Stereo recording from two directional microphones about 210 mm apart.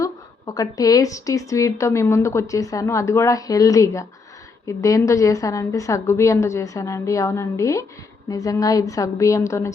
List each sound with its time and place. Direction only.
0.0 s a woman's voice: 15° left (ahead or behind)